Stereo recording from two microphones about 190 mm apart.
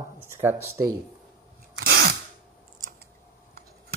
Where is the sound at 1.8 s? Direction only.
75° right (ahead or behind).